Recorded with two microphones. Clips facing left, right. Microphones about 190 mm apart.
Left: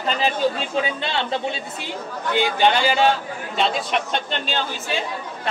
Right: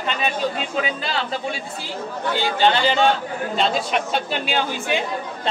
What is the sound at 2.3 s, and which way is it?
Speech, 10° left (ahead or behind).